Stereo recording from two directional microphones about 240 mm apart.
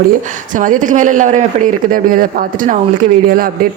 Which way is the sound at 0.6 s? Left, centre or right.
Right.